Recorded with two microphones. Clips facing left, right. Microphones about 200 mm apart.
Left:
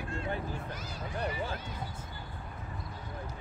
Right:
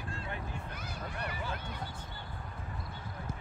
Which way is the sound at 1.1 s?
30° left (ahead or behind).